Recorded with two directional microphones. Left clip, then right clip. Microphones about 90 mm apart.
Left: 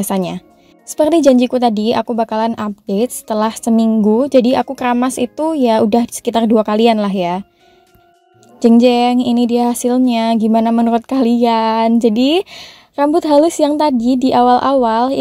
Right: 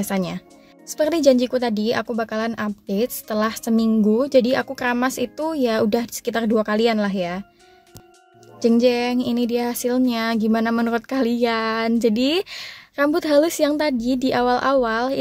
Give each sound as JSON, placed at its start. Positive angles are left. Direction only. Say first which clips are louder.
{"t": 0.0, "sound": "a woman's voice", "louder": "left 6 dB", "side_deg": 70}
{"t": 8.5, "sound": "a woman's voice", "louder": "left 7 dB", "side_deg": 65}
{"t": 11.0, "sound": "a woman's voice", "louder": "left 7 dB", "side_deg": 55}